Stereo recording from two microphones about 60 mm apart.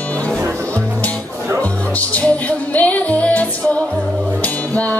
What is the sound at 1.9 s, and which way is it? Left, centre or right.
Music, left.